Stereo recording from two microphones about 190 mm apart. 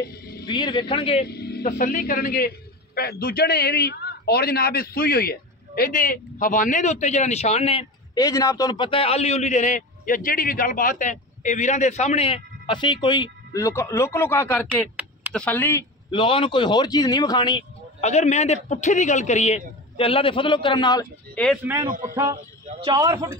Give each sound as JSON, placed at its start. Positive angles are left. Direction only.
{"t": 0.0, "sound": "a sound", "side_deg": 50}
{"t": 0.5, "sound": "a man's voice", "side_deg": 25}
{"t": 1.2, "sound": "vehicle", "side_deg": 55}
{"t": 1.7, "sound": "a man's voice", "side_deg": 40}
{"t": 8.2, "sound": "a man's voice", "side_deg": 15}
{"t": 16.1, "sound": "a man's voice", "side_deg": 25}
{"t": 18.0, "sound": "a man's voice", "side_deg": 35}
{"t": 21.4, "sound": "speech", "side_deg": 5}
{"t": 21.8, "sound": "speech", "side_deg": -45}
{"t": 22.9, "sound": "a man's voice", "side_deg": -15}